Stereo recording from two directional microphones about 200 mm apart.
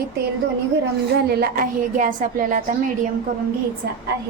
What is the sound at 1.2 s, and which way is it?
A woman's voice, 50° right (ahead or behind).